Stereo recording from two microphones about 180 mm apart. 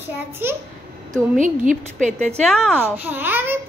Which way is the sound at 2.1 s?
5° left (ahead or behind).